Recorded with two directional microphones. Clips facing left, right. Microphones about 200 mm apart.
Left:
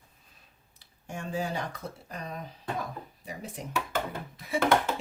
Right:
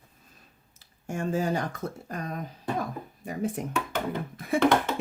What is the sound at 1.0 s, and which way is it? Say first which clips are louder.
Speech: right 5 dB; 45° right (ahead or behind).